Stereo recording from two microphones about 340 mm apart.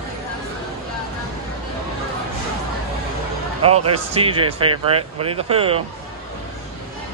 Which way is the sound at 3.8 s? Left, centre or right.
Centre.